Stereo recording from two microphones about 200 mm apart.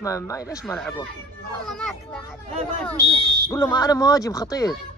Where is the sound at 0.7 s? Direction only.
5° left (ahead or behind).